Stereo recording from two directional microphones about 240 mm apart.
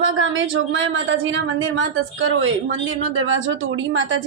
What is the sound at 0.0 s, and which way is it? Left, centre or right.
A woman's voice, right.